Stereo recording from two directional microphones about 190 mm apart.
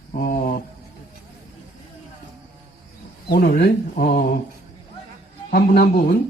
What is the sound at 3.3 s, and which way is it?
A man's voice, 55° left (ahead or behind).